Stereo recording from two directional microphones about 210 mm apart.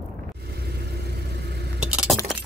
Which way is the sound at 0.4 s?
50° right (ahead or behind).